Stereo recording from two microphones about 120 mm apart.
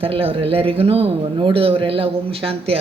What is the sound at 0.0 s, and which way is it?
Speech, 50° right (ahead or behind).